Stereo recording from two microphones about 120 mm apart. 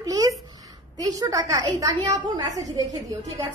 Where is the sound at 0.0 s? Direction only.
30° right (ahead or behind).